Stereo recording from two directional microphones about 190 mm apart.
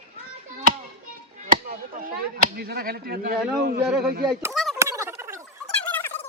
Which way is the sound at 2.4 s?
55° right (ahead or behind).